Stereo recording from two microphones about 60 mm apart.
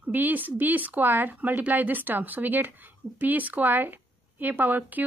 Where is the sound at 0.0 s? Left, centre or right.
Right.